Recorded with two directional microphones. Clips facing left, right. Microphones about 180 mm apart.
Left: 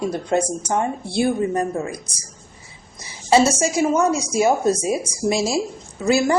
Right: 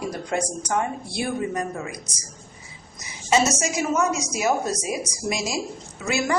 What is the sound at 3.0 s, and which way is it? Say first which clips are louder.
A woman's voice: left 5 dB; 30° left (ahead or behind).